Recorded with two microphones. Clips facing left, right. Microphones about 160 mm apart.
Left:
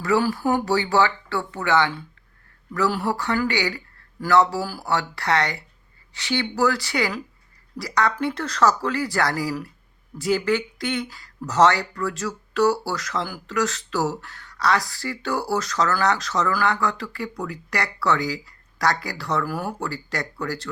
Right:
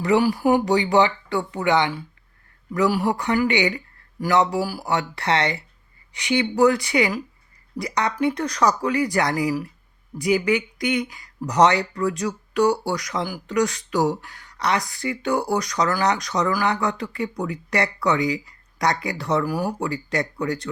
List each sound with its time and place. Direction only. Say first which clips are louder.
0.0 s speech: right 3 dB; 20° right (ahead or behind)